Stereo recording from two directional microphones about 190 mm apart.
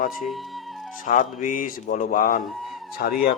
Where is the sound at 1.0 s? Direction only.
45° left (ahead or behind).